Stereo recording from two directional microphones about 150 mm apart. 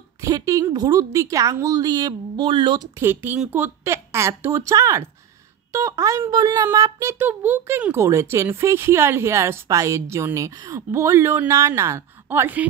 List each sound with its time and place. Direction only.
0.2 s a woman's voice: 20° right (ahead or behind)
3.0 s speech: 15° right (ahead or behind)